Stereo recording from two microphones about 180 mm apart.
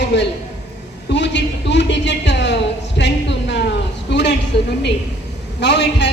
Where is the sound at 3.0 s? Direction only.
75° left (ahead or behind).